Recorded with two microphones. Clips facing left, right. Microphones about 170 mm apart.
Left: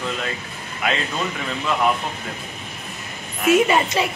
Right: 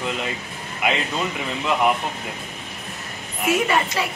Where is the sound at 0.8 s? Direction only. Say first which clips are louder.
Right 1 dB; 15° right (ahead or behind).